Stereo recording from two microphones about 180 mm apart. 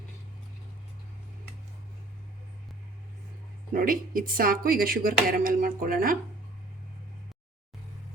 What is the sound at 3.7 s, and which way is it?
Speech, 50° right (ahead or behind).